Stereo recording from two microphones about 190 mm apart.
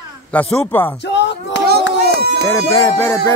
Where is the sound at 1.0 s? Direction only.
65° left (ahead or behind).